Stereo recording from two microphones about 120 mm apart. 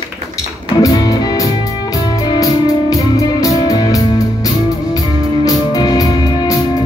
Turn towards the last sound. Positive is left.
turn(degrees=35)  # may be behind; listen again after turning